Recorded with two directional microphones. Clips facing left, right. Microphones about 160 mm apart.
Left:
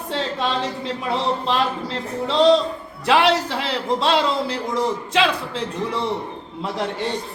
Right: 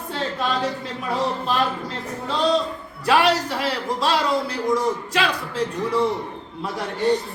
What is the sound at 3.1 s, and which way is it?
Speech, 25° left (ahead or behind).